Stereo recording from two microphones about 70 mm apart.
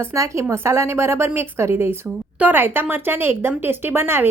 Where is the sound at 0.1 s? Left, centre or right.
Right.